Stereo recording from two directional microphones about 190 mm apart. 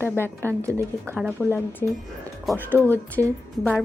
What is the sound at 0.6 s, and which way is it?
Speech, 15° right (ahead or behind).